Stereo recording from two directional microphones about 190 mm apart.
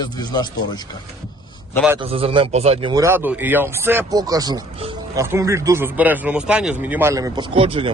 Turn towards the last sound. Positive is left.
turn(degrees=-30)  # may be behind; listen again after turning